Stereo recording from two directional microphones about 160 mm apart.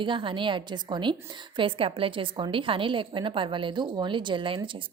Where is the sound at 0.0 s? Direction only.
30° right (ahead or behind).